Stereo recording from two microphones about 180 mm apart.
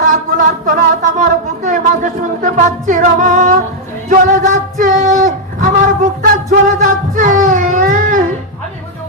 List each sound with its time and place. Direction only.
0.0 s speech: 45° right (ahead or behind)
4.1 s music: 45° right (ahead or behind)